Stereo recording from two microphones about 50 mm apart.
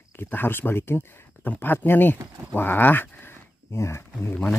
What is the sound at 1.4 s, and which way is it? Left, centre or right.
Speech, left.